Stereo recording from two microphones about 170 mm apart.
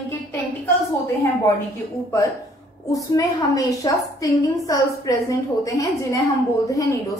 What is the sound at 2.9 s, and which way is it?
A woman's voice, 20° left (ahead or behind).